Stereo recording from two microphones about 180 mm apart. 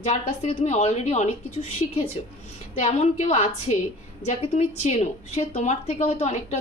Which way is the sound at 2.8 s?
35° left (ahead or behind).